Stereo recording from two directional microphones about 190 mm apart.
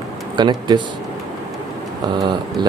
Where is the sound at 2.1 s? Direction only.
20° right (ahead or behind).